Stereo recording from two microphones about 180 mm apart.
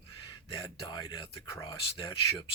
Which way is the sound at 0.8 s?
25° left (ahead or behind).